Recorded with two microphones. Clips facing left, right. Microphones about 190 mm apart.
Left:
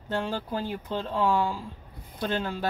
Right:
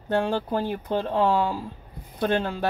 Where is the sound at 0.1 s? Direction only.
55° right (ahead or behind).